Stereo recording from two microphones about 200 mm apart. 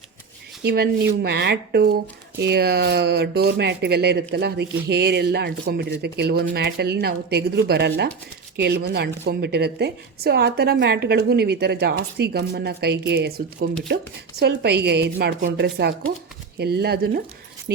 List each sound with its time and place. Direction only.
0.6 s a woman's voice: 50° right (ahead or behind)